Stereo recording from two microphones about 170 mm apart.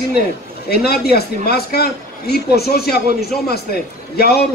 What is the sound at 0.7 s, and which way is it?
A man's voice, 65° left (ahead or behind).